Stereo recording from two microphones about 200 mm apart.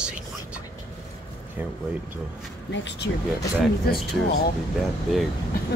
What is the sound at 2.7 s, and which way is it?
Speech, 60° left (ahead or behind).